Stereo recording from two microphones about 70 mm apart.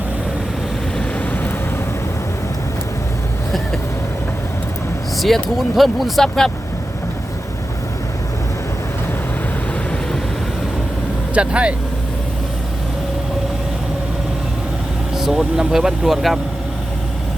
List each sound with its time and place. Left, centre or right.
0.9 s vehicle: left
5.1 s speech: centre
11.3 s speech: centre
15.1 s vehicle: centre
15.4 s speech: centre